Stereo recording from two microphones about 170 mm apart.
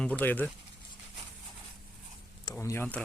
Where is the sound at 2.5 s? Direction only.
15° left (ahead or behind).